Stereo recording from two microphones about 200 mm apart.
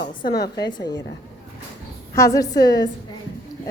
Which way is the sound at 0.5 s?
20° left (ahead or behind).